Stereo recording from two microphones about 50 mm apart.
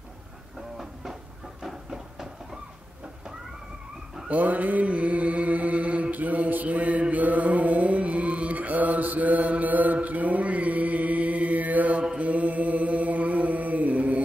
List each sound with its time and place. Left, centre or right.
1.6 s a sound: centre
4.3 s mantra: right
12.2 s chant: right